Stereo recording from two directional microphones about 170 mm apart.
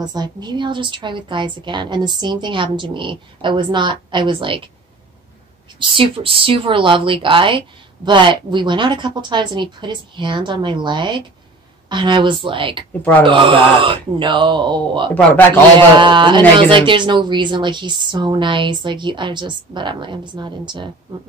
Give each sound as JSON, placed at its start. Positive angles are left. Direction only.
{"t": 0.0, "sound": "speech", "side_deg": -25}
{"t": 5.8, "sound": "speech", "side_deg": -30}